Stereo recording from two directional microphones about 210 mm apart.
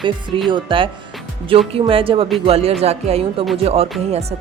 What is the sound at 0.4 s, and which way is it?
A woman's voice, 25° right (ahead or behind).